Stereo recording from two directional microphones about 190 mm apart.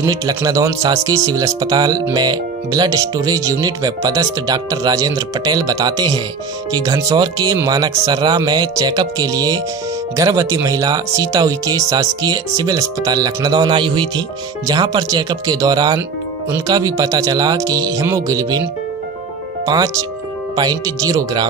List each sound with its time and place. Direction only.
0.0 s speech: 20° right (ahead or behind)
19.6 s speech: 20° right (ahead or behind)